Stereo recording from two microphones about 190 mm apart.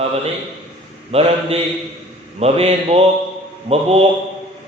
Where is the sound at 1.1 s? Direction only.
30° right (ahead or behind).